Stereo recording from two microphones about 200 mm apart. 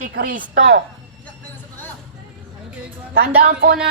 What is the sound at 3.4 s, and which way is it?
Speech, 50° right (ahead or behind).